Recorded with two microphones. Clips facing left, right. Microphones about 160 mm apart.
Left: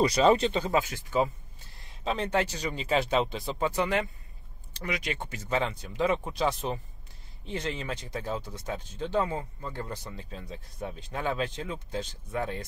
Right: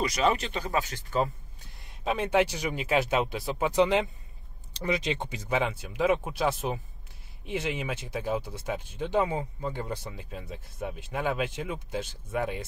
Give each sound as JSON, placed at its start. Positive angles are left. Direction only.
{"t": 0.0, "sound": "speech", "side_deg": 30}
{"t": 0.8, "sound": "speech", "side_deg": 5}
{"t": 3.6, "sound": "speech", "side_deg": -20}